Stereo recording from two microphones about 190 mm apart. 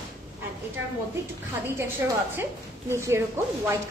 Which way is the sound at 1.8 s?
10° right (ahead or behind).